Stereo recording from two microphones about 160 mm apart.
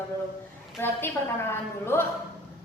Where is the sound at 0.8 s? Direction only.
15° left (ahead or behind).